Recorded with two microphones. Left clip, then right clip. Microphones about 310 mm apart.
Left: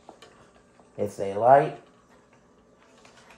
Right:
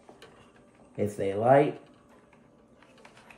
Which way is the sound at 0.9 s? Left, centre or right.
Centre.